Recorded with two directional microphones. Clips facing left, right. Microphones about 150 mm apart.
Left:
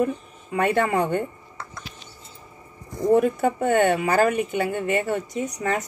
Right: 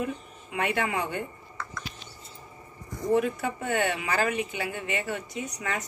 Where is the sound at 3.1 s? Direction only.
45° left (ahead or behind).